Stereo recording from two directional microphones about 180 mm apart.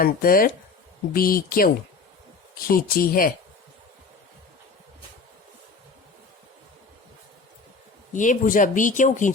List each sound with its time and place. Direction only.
0.0 s speech: 50° left (ahead or behind)
8.1 s speech: 45° left (ahead or behind)